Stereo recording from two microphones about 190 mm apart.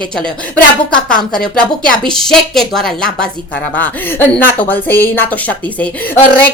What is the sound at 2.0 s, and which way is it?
A woman's voice, centre (ahead or behind).